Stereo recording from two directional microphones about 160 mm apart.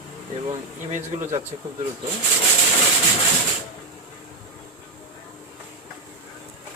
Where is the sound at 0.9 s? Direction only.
50° right (ahead or behind).